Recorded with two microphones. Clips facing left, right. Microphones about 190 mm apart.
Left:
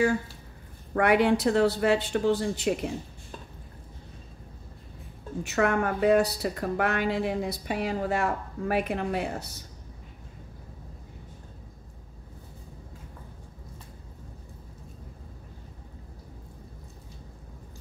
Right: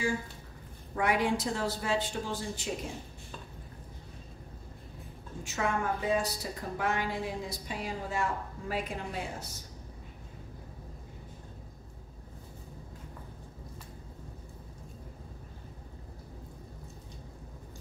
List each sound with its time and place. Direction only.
0.9 s a woman's voice: 65° left (ahead or behind)
5.4 s a woman's voice: 65° left (ahead or behind)